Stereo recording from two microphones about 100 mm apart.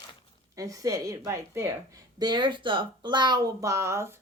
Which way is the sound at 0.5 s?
35° right (ahead or behind).